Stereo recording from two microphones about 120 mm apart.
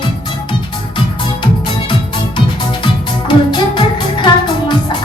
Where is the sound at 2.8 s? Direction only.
40° left (ahead or behind).